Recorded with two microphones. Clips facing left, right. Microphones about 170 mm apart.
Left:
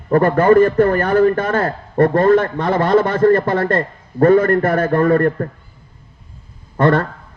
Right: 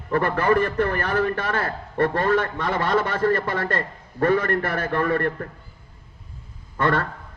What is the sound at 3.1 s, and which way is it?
A man's voice, 50° left (ahead or behind).